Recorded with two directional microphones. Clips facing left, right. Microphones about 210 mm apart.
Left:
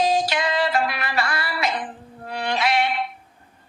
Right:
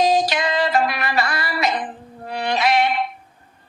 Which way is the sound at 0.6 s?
40° right (ahead or behind).